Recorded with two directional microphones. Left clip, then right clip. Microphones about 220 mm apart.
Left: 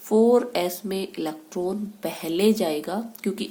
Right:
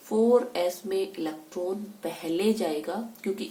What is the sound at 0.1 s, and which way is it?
Speech, 50° left (ahead or behind).